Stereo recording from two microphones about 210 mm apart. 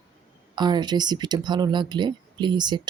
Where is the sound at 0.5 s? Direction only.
20° right (ahead or behind).